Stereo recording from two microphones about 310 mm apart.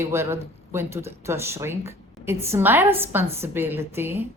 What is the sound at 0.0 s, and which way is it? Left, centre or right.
A woman's voice, centre.